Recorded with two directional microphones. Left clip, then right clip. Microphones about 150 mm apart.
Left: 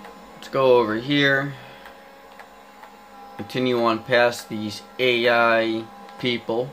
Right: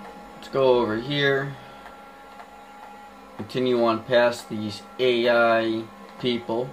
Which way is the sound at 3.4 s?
50° left (ahead or behind).